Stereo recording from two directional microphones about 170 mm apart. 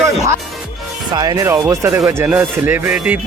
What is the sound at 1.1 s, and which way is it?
Speech, 25° right (ahead or behind).